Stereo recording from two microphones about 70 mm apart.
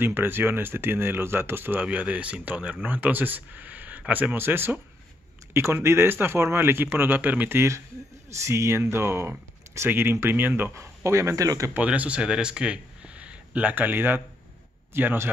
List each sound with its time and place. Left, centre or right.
0.0 s a man's voice: right
7.5 s a man's voice: right
11.1 s speech: right
11.7 s speech: right